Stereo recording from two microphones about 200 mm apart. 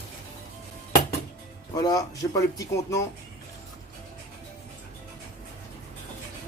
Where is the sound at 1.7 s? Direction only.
20° left (ahead or behind).